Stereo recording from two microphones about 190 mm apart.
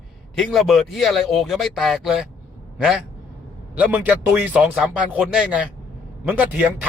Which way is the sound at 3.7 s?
10° right (ahead or behind).